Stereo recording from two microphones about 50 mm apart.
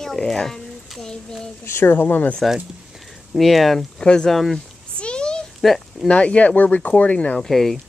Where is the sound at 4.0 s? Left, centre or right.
Centre.